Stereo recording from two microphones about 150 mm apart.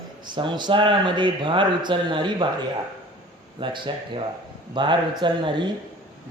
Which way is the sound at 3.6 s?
35° right (ahead or behind).